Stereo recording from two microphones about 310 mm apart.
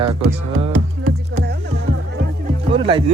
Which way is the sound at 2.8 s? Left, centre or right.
Centre.